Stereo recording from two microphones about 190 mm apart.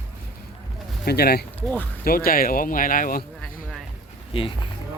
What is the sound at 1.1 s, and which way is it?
Speech, 55° left (ahead or behind).